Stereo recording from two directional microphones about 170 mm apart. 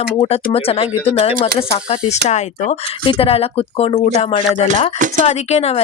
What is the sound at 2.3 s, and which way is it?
Speech, 40° left (ahead or behind).